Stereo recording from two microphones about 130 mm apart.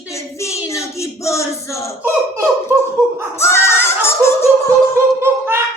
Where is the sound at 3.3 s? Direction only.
20° left (ahead or behind).